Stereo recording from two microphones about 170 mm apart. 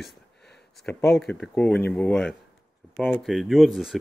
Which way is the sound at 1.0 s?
Centre (ahead or behind).